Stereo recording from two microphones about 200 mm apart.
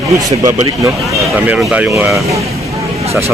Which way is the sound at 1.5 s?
5° right (ahead or behind).